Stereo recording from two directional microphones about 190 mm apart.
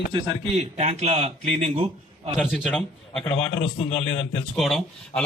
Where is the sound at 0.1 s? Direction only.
35° right (ahead or behind).